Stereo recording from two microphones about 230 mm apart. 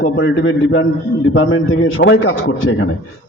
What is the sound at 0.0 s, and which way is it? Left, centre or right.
A man's voice, left.